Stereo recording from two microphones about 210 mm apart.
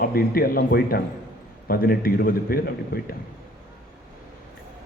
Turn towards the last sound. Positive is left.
turn(degrees=45)  # may be behind; listen again after turning